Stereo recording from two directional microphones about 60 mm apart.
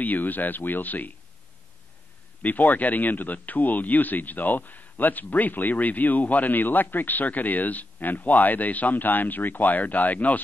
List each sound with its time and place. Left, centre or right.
0.0 s speech: left
2.4 s speech: left